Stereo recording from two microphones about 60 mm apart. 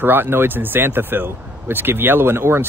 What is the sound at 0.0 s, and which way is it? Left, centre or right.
Speech, right.